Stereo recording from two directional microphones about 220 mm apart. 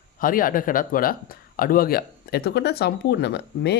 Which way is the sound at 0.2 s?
40° left (ahead or behind).